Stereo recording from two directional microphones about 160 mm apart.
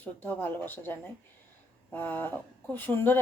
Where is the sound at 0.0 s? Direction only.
10° left (ahead or behind).